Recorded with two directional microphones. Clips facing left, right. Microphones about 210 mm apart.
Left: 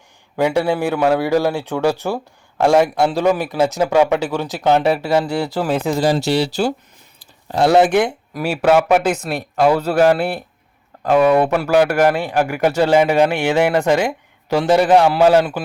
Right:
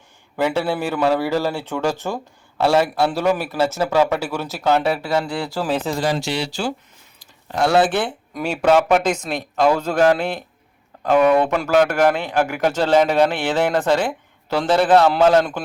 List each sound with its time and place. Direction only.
0.3 s speech: 10° left (ahead or behind)
6.0 s speech: 35° left (ahead or behind)
7.7 s speech: 15° left (ahead or behind)